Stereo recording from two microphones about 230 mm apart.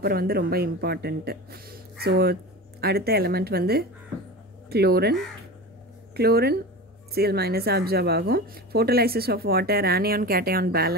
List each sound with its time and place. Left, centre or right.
0.0 s speech: right
6.1 s speech: right